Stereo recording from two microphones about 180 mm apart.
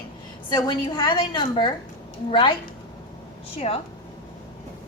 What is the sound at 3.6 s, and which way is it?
Speech, 35° left (ahead or behind).